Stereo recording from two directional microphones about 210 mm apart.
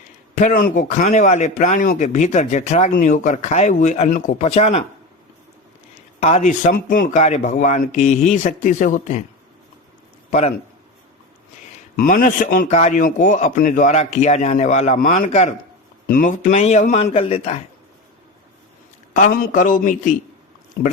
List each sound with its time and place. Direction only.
0.3 s a man's voice: 40° left (ahead or behind)
6.1 s a man's voice: 30° left (ahead or behind)
11.9 s a man's voice: 40° left (ahead or behind)
19.1 s a man's voice: 40° left (ahead or behind)